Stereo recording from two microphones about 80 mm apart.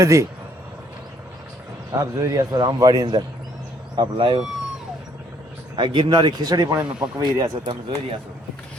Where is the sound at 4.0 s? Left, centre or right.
Right.